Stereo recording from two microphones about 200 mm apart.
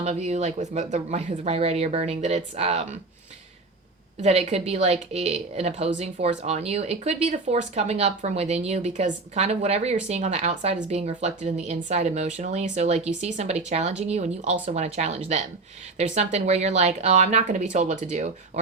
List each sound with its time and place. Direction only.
0.0 s speech: 35° right (ahead or behind)
4.2 s speech: 35° right (ahead or behind)